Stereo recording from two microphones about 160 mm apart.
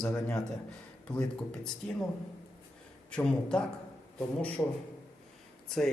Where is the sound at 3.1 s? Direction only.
5° left (ahead or behind).